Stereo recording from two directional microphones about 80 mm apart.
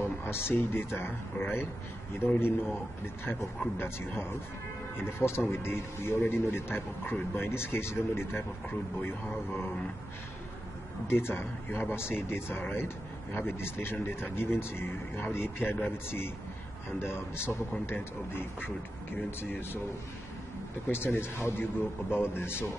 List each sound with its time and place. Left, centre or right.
0.0 s a man's voice: left
11.1 s speech: left
20.9 s speech: left